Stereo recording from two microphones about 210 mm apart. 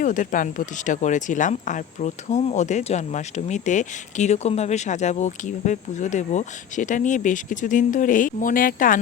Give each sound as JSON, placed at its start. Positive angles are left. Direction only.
{"t": 0.0, "sound": "speech", "side_deg": 40}